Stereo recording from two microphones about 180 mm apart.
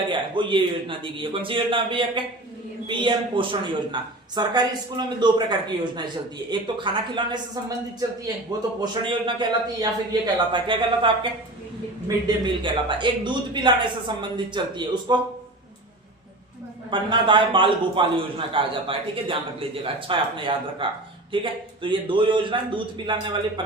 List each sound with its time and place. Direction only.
0.1 s a man's voice: 25° right (ahead or behind)
8.8 s a man's voice: 25° right (ahead or behind)
16.9 s a man's voice: 25° right (ahead or behind)